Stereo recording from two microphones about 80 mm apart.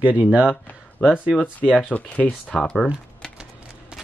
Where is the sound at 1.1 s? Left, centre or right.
Centre.